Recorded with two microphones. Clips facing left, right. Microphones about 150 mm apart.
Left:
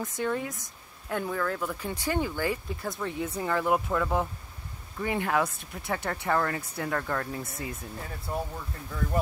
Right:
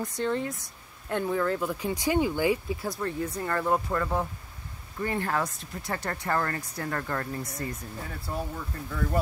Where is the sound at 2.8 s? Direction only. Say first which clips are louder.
Even; centre (ahead or behind).